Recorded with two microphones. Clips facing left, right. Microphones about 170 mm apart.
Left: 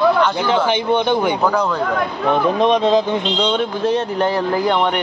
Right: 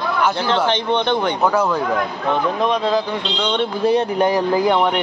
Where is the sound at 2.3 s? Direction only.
20° left (ahead or behind).